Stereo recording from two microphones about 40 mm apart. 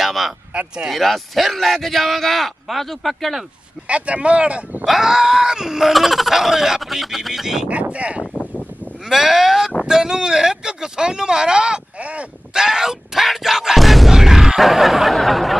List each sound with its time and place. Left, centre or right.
0.0 s a sound: centre
0.5 s speech: right
0.9 s a man's voice: centre
3.8 s speech: right
4.8 s screaming: centre
5.9 s a man's voice: centre
7.6 s speech: right
9.1 s speech: centre; by 12.3 s right
12.5 s speech: centre
14.1 s speech: centre
14.6 s a man's voice: centre